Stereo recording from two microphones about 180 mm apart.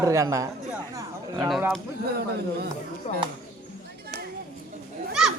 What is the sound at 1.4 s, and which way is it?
Speech, centre (ahead or behind).